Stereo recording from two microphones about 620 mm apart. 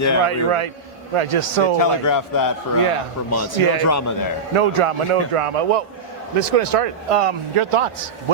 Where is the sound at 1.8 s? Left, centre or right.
Left.